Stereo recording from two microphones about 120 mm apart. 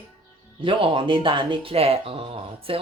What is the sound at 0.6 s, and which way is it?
Speech, 45° right (ahead or behind).